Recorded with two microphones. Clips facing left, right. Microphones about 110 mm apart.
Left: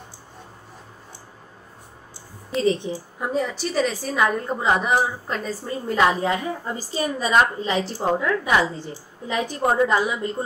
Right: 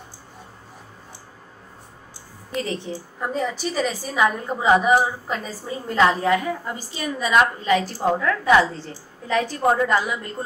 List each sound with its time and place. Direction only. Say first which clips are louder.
2.5 s a woman's voice: left 6 dB; 20° left (ahead or behind)
3.2 s a woman's voice: even; centre (ahead or behind)
5.9 s a woman's voice: right 2 dB; 20° left (ahead or behind)
6.8 s a woman's voice: left 2 dB; 35° left (ahead or behind); by 10.3 s 20° left (ahead or behind)